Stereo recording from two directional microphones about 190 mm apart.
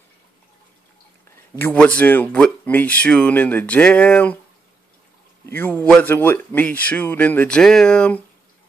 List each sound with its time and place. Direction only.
1.6 s speech: 10° left (ahead or behind)
5.5 s speech: 10° left (ahead or behind)